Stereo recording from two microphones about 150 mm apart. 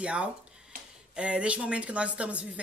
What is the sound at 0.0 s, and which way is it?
Speech, 5° right (ahead or behind).